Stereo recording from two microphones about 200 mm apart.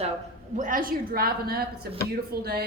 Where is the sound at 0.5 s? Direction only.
45° right (ahead or behind).